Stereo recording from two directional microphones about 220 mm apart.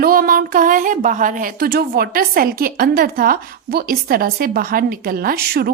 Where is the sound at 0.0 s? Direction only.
40° right (ahead or behind).